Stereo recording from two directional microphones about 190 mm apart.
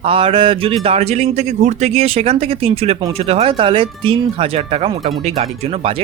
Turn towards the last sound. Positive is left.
turn(degrees=-30)  # may be behind; listen again after turning